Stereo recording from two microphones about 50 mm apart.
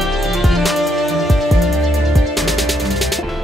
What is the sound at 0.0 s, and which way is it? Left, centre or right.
Music, centre.